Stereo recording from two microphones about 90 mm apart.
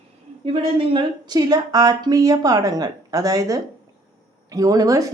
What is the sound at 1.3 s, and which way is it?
Speech, 50° right (ahead or behind).